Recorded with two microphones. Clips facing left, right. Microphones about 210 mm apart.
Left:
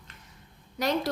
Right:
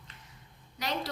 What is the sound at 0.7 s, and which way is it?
Speech, 45° left (ahead or behind).